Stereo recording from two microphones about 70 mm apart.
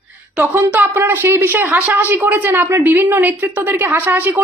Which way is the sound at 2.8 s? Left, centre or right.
Right.